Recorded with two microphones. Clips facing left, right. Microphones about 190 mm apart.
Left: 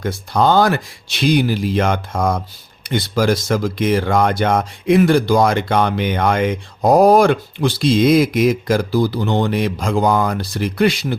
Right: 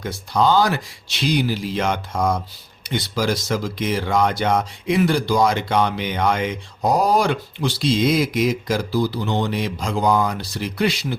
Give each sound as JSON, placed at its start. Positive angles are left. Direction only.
{"t": 0.0, "sound": "speech", "side_deg": 55}